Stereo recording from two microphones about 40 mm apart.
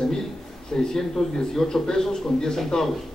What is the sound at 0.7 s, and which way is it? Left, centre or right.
A man's voice, centre.